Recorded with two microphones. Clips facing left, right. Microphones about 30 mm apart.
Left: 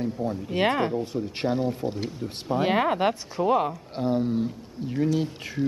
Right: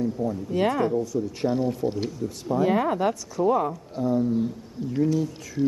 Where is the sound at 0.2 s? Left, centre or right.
Left.